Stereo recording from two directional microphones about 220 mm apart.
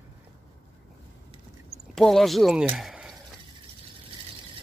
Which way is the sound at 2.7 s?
Centre (ahead or behind).